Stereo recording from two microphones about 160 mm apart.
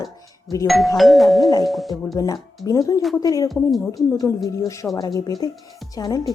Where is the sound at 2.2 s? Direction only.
20° left (ahead or behind).